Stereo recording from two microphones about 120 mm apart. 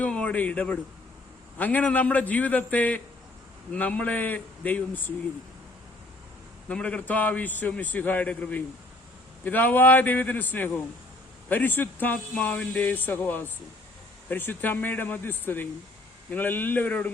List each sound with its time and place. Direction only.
0.0 s speech: 10° left (ahead or behind)
6.7 s speech: 10° left (ahead or behind)